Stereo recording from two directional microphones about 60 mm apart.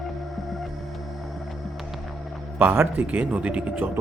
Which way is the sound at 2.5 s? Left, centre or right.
Right.